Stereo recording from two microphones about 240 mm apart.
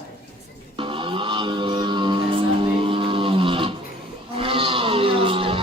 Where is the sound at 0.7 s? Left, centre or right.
Right.